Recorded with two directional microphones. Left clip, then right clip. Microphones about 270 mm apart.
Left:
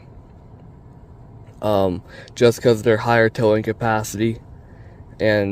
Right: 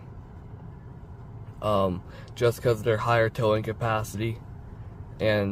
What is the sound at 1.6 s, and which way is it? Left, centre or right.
Speech, left.